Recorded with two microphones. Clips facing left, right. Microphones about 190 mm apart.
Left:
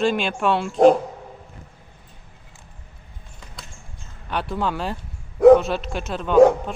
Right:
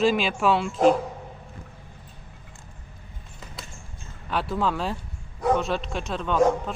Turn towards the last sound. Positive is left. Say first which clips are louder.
# left 2 dB
turn(degrees=0)  # may be behind; listen again after turning